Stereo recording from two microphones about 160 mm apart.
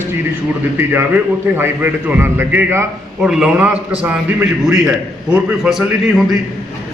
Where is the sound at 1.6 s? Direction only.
15° right (ahead or behind).